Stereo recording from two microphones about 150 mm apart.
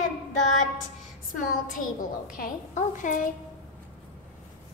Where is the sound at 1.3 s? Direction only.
60° left (ahead or behind).